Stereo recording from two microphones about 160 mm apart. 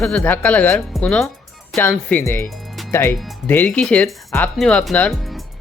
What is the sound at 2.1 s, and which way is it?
Speech, 10° left (ahead or behind).